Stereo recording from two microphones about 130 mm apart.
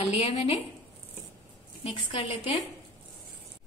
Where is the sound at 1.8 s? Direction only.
45° left (ahead or behind).